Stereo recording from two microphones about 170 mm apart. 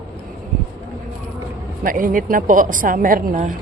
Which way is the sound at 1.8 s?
55° right (ahead or behind).